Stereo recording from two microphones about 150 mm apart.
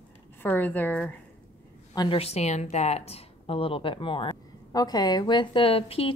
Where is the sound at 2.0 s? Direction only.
40° left (ahead or behind).